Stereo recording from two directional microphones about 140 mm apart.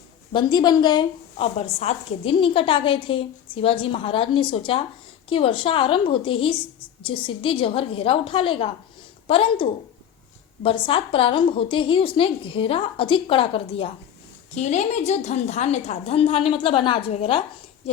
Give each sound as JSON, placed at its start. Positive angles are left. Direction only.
{"t": 0.3, "sound": "a woman's voice", "side_deg": 30}
{"t": 1.5, "sound": "a woman's voice", "side_deg": 50}
{"t": 14.5, "sound": "a woman's voice", "side_deg": 55}